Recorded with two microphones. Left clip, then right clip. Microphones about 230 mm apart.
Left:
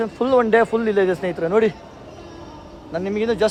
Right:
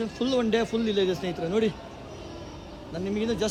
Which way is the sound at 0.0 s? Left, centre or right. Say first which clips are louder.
Left 9 dB; left.